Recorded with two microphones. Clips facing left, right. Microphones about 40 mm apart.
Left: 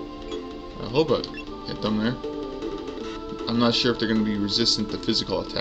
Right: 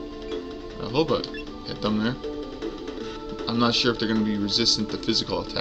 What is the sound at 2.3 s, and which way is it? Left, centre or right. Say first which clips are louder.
Music: left 2 dB; left.